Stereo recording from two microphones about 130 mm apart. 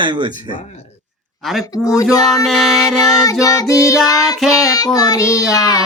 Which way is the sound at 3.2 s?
25° left (ahead or behind).